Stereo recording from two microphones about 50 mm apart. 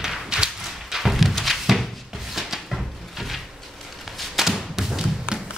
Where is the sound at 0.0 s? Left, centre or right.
Centre.